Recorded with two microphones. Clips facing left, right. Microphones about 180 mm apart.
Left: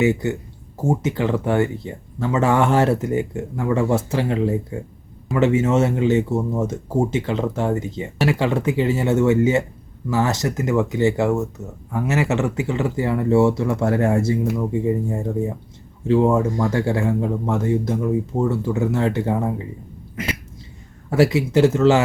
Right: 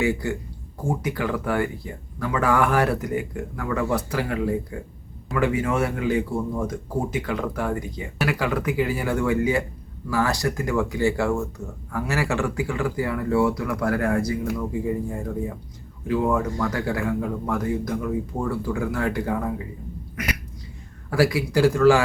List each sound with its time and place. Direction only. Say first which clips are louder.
0.0 s speech: left 5 dB; 20° left (ahead or behind)
20.1 s dog: left 2 dB; 25° left (ahead or behind)
21.1 s speech: left 4 dB; 25° left (ahead or behind)